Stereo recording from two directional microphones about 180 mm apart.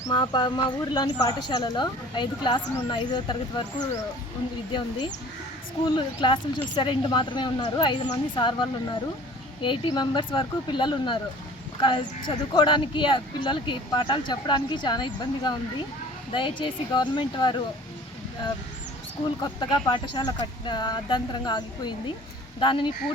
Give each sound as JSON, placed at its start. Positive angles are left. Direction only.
{"t": 0.0, "sound": "speech", "side_deg": 25}
{"t": 19.4, "sound": "speech", "side_deg": 25}